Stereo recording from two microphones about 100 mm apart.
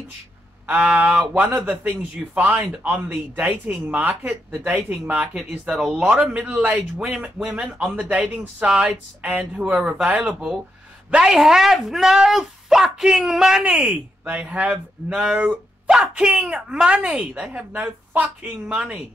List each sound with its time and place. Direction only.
0.7 s speech: 15° right (ahead or behind)
5.8 s speech: 5° right (ahead or behind)